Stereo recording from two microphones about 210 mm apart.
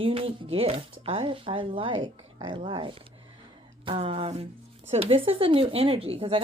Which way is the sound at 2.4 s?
25° right (ahead or behind).